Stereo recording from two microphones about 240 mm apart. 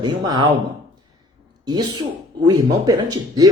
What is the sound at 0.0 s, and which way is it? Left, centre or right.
Speech, centre.